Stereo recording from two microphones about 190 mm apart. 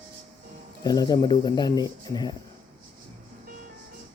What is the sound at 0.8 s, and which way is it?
Speech, 20° left (ahead or behind).